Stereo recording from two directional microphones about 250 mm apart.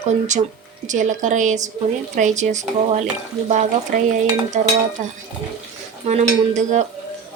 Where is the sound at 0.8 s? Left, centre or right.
Right.